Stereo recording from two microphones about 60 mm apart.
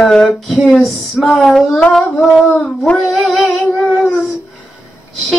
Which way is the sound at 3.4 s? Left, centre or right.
Left.